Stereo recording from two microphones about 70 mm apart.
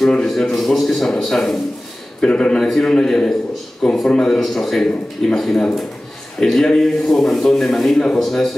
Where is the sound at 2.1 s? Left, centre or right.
Centre.